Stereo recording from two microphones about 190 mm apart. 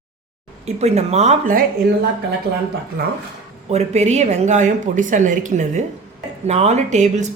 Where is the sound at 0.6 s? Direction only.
35° right (ahead or behind).